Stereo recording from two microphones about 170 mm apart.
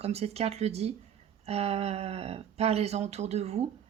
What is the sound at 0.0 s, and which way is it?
Speech, 40° right (ahead or behind).